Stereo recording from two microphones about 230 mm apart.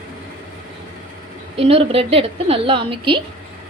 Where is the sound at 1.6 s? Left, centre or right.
Right.